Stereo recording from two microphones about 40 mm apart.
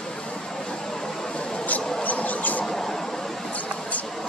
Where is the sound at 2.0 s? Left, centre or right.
Left.